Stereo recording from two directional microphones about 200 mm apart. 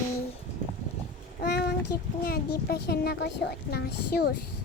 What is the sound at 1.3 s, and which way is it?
Child singing, 55° left (ahead or behind).